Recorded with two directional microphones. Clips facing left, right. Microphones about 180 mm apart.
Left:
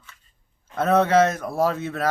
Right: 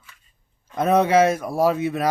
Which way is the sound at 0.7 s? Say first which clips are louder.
Right 1 dB; 15° right (ahead or behind).